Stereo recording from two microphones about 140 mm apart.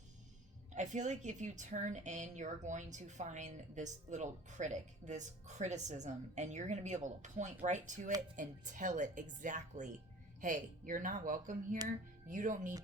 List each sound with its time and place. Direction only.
0.7 s a woman's voice: 60° right (ahead or behind)